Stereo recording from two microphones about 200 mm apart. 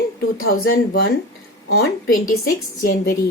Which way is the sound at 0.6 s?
50° left (ahead or behind).